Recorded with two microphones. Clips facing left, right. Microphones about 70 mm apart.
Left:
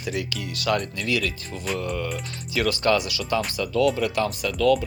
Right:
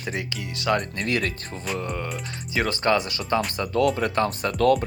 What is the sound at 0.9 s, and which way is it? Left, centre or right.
Speech, right.